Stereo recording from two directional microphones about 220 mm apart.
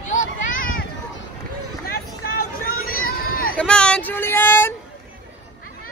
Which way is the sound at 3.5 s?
5° left (ahead or behind).